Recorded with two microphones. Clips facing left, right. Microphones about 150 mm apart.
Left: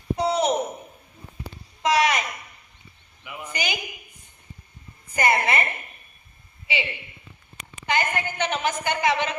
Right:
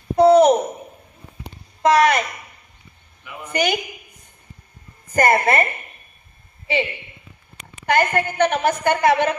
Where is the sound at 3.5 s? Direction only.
55° right (ahead or behind).